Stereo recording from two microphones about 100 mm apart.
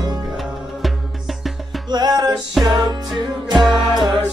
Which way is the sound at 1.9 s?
45° right (ahead or behind).